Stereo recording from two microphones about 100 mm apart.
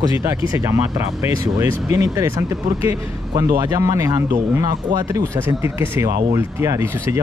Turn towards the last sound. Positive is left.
turn(degrees=-30)  # may be behind; listen again after turning